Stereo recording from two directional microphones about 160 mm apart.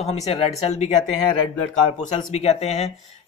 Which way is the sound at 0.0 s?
40° left (ahead or behind).